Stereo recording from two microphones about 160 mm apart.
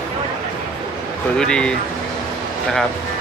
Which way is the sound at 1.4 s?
5° left (ahead or behind).